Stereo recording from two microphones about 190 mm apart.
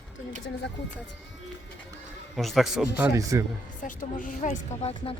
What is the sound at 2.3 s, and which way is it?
Speech, centre (ahead or behind).